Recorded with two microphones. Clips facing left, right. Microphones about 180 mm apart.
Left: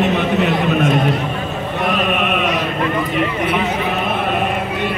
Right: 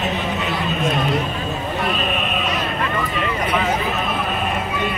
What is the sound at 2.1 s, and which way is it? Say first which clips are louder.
Chant: left 5 dB; 65° left (ahead or behind).